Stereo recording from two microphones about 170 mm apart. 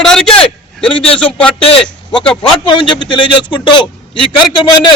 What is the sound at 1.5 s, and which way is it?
A man's voice, 35° left (ahead or behind).